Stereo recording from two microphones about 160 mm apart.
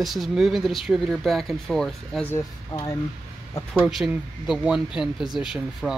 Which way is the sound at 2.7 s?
30° left (ahead or behind).